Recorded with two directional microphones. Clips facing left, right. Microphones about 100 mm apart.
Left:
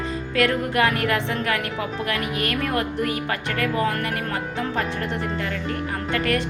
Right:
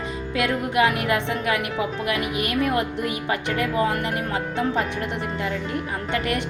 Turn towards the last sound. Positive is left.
turn(degrees=-20)  # may be behind; listen again after turning